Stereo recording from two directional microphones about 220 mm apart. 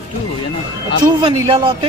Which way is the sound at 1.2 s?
20° right (ahead or behind).